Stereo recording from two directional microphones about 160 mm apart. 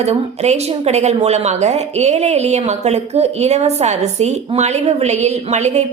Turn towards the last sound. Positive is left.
turn(degrees=-45)  # may be behind; listen again after turning